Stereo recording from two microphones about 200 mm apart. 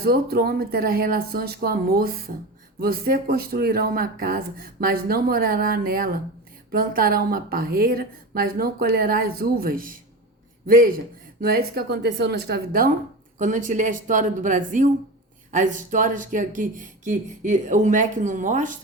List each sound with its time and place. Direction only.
0.0 s speech: 50° right (ahead or behind)